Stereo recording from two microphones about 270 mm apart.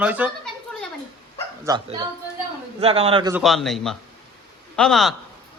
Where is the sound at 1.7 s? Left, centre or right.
Centre.